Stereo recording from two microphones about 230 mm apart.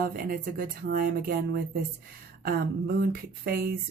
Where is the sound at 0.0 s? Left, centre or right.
Right.